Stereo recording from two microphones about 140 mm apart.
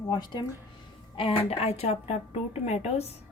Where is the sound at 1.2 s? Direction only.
40° left (ahead or behind).